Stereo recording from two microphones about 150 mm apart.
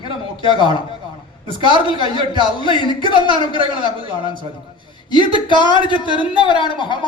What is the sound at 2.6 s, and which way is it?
Speech, 35° left (ahead or behind).